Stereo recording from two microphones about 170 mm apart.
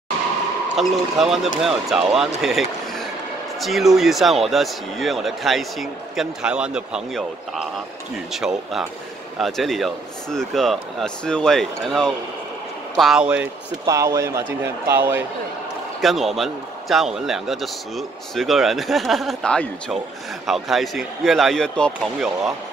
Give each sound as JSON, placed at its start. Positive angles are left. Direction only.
{"t": 0.7, "sound": "a man's voice", "side_deg": 0}
{"t": 3.6, "sound": "a man's voice", "side_deg": 0}
{"t": 13.8, "sound": "speech", "side_deg": -20}
{"t": 16.0, "sound": "a man's voice", "side_deg": 0}